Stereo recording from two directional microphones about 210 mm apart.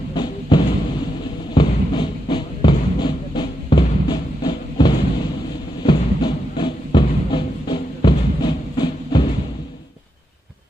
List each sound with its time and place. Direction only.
0.1 s music: 20° left (ahead or behind)